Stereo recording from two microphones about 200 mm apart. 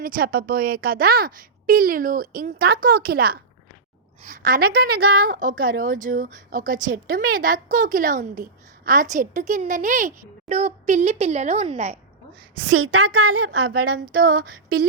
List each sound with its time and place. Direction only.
0.0 s a woman's voice: 45° right (ahead or behind)
12.7 s a woman's voice: 85° right
13.7 s a woman's voice: 50° right (ahead or behind)